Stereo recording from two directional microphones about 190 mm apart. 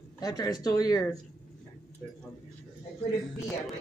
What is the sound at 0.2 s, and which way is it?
Speech, 20° left (ahead or behind).